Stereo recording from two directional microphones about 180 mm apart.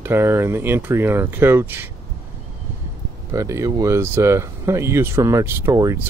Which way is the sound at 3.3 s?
15° right (ahead or behind).